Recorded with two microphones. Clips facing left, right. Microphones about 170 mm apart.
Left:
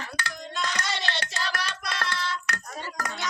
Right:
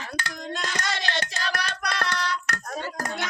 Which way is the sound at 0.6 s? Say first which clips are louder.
Left 1 dB; 45° right (ahead or behind).